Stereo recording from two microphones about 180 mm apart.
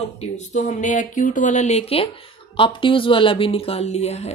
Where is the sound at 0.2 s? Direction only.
40° left (ahead or behind).